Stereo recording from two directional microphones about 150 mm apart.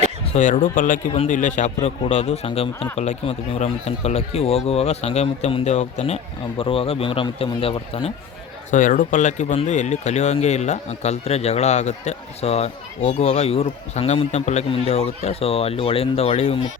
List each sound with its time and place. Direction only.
0.3 s speech: 60° left (ahead or behind)
1.1 s speech: 50° left (ahead or behind)
6.6 s a man's voice: 35° left (ahead or behind)
8.7 s speech: 60° left (ahead or behind); by 16.6 s 45° left (ahead or behind)